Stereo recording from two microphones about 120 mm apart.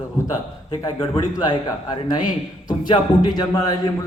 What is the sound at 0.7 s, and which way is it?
A man's voice, 35° left (ahead or behind).